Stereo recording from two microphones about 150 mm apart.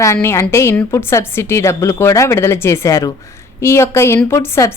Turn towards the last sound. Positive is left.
turn(degrees=15)  # may be behind; listen again after turning